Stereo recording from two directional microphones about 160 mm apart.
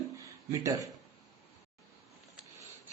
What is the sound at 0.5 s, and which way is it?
Speech, 20° right (ahead or behind).